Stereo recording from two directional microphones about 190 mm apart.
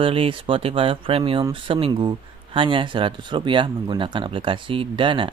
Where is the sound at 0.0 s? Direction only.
30° right (ahead or behind).